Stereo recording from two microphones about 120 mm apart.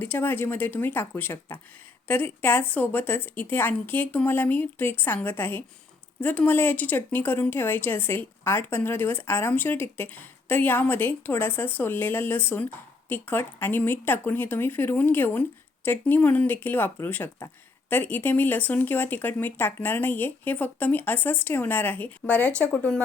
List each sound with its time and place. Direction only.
0.0 s speech: 15° left (ahead or behind)